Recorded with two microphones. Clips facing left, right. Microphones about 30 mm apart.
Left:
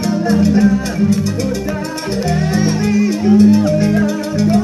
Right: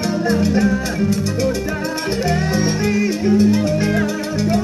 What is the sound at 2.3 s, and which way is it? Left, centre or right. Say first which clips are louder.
Music: left 5 dB; centre.